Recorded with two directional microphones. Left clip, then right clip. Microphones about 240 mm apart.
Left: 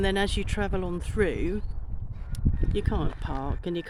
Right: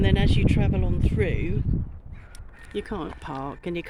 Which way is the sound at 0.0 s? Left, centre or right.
Centre.